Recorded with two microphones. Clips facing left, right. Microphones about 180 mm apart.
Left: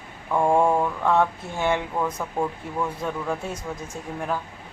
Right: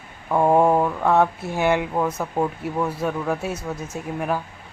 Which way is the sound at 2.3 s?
25° right (ahead or behind).